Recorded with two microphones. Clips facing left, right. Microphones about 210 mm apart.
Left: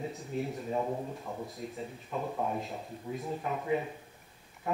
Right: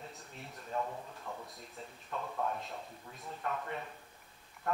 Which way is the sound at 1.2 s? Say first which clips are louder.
Left 6 dB; 20° left (ahead or behind).